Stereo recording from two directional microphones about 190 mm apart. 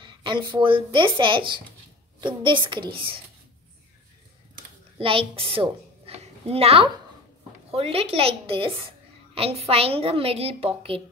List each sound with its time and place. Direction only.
0.0 s speech: 25° right (ahead or behind)
4.9 s a woman's voice: 30° right (ahead or behind)